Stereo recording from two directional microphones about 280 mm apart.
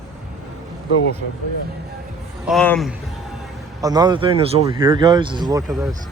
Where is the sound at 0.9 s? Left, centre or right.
Left.